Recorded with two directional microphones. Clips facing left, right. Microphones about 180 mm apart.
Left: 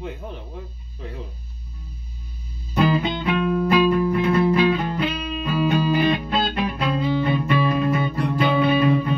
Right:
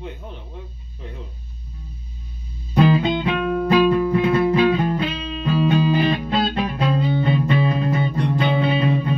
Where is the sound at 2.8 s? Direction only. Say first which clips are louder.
Right 3 dB; 20° right (ahead or behind).